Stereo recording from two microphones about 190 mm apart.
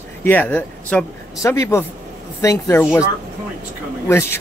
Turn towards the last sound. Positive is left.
turn(degrees=15)  # may be behind; listen again after turning